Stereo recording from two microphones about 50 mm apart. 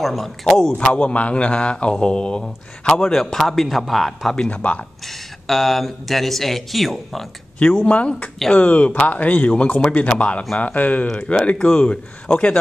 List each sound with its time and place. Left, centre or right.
0.0 s speech: centre
0.7 s speech: left; by 4.4 s centre
4.5 s speech: left
5.0 s speech: centre
7.5 s speech: left